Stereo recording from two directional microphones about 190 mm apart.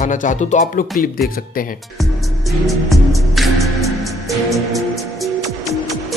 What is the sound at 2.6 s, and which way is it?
Music, centre (ahead or behind).